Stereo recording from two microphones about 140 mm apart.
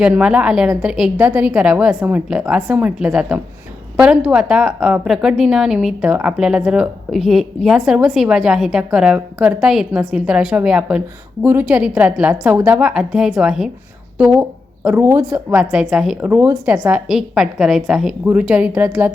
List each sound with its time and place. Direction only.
0.0 s a woman's voice: 5° right (ahead or behind)
15.7 s a woman's voice: 5° right (ahead or behind)
17.1 s a woman's voice: 5° right (ahead or behind)